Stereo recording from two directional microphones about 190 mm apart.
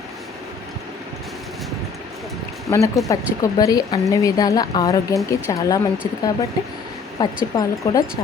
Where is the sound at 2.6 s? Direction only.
15° left (ahead or behind).